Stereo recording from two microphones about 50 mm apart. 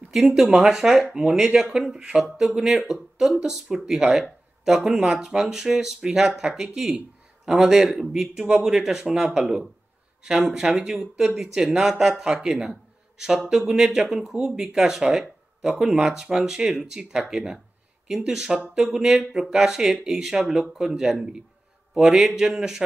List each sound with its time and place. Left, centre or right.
0.1 s speech: centre
13.9 s a man's voice: centre